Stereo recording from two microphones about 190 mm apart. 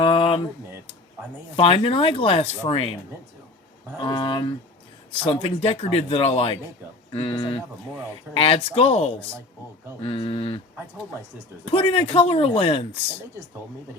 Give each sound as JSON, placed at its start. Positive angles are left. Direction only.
{"t": 0.0, "sound": "a sound", "side_deg": 25}
{"t": 1.5, "sound": "speech", "side_deg": 25}
{"t": 4.0, "sound": "speech", "side_deg": 25}
{"t": 11.6, "sound": "speech", "side_deg": 30}